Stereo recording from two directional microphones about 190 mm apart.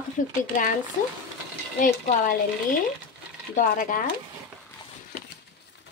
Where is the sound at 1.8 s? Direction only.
45° left (ahead or behind).